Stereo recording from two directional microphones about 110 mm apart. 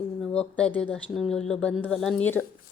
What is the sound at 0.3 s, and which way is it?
Speech, 10° left (ahead or behind).